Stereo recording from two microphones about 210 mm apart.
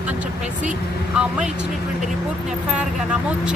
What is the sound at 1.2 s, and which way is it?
Speech, 5° right (ahead or behind).